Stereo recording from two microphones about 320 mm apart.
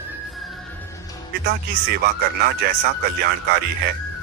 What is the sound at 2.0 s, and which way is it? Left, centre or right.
Speech, right.